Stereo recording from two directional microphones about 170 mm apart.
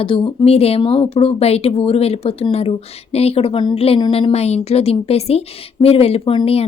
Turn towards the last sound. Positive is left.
turn(degrees=30)  # may be behind; listen again after turning